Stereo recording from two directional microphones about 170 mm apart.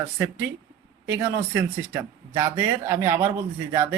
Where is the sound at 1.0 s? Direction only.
15° right (ahead or behind).